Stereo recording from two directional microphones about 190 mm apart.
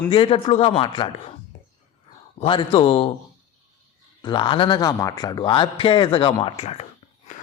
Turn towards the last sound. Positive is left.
turn(degrees=30)  # may be behind; listen again after turning